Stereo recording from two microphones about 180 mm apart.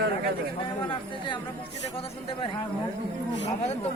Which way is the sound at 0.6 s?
25° left (ahead or behind).